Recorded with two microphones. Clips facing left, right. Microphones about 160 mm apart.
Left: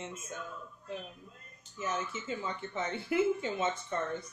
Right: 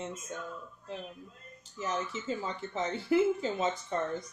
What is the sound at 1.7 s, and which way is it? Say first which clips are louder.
Speech: right 1 dB; 35° right (ahead or behind).